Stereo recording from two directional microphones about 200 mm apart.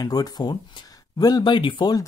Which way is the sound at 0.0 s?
20° left (ahead or behind).